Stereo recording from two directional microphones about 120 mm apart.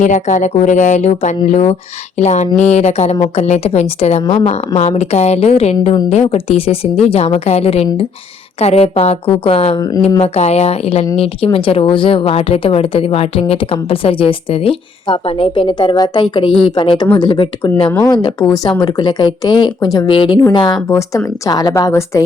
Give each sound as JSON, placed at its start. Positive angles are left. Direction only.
{"t": 0.0, "sound": "a woman's voice", "side_deg": 90}
{"t": 18.5, "sound": "a woman's voice", "side_deg": 35}